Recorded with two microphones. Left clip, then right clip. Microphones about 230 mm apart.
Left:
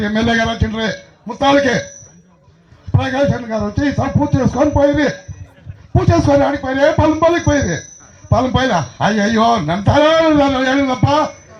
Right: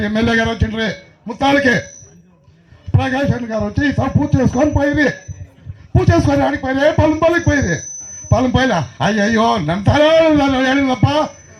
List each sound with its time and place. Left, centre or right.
0.0 s speech: right
2.9 s speech: right